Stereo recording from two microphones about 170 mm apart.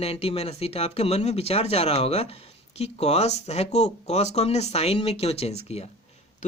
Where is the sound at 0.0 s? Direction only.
35° left (ahead or behind).